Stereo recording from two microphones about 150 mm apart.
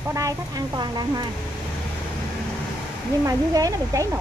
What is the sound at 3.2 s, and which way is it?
Speech, 25° right (ahead or behind).